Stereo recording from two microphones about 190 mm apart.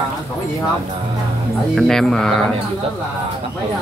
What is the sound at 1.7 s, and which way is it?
Speech, centre (ahead or behind).